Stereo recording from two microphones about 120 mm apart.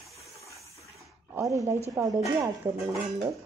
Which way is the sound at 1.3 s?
25° right (ahead or behind).